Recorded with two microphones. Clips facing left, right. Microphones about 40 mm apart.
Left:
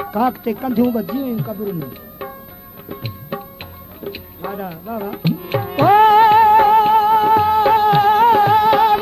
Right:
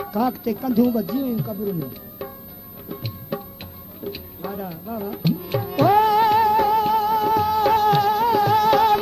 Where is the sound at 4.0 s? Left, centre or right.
Left.